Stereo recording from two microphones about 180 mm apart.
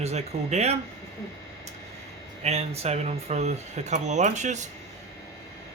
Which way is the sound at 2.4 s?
35° right (ahead or behind).